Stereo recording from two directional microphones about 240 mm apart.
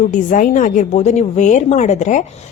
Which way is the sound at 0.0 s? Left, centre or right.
Left.